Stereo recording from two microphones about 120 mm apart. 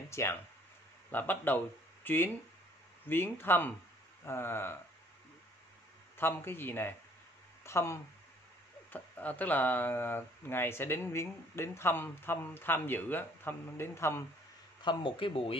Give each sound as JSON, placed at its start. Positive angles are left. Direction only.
{"t": 0.1, "sound": "a man's voice", "side_deg": 20}
{"t": 6.1, "sound": "a man's voice", "side_deg": 20}
{"t": 14.8, "sound": "speech", "side_deg": 45}